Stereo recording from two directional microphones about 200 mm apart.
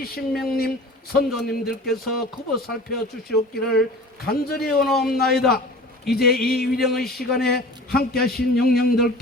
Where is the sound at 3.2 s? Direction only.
50° left (ahead or behind).